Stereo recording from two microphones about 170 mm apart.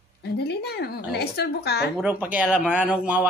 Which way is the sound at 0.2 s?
80° left.